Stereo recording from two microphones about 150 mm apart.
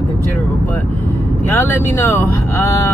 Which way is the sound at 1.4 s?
15° left (ahead or behind).